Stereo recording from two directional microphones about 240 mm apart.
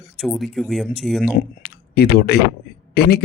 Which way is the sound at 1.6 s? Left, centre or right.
Left.